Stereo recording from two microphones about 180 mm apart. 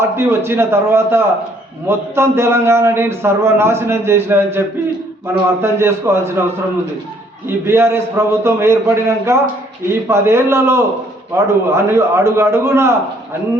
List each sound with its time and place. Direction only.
0.0 s a man's voice: 15° right (ahead or behind)
5.6 s a man's voice: 15° right (ahead or behind)
7.4 s a man's voice: 15° right (ahead or behind)